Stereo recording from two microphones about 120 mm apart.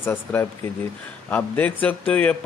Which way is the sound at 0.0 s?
15° left (ahead or behind).